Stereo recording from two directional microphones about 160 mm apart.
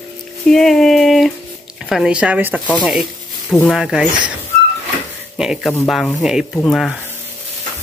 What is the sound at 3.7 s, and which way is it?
Speech, 5° right (ahead or behind).